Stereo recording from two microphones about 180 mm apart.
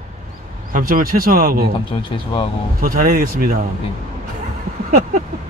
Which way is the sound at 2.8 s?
50° right (ahead or behind).